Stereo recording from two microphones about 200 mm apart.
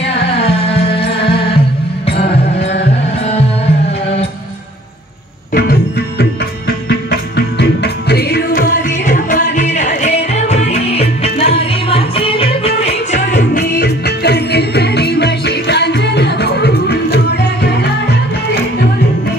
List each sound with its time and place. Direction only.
0.3 s music: 30° left (ahead or behind)
2.0 s music: 30° left (ahead or behind)
5.5 s music: 50° left (ahead or behind)
9.0 s music: 40° left (ahead or behind)
13.4 s music: 55° left (ahead or behind)